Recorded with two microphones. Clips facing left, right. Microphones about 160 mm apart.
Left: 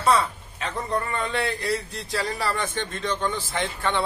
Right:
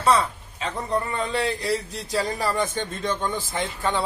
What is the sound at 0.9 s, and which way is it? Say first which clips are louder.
A man's voice: right 2 dB; 10° right (ahead or behind).